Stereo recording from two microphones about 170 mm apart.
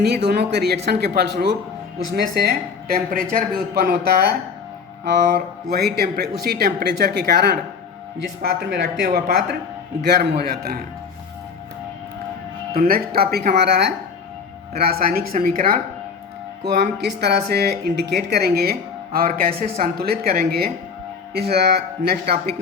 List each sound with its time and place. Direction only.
0.3 s speech: 75° right (ahead or behind)
12.9 s speech: 65° right (ahead or behind)
14.8 s speech: 65° right (ahead or behind)
16.6 s speech: 80° right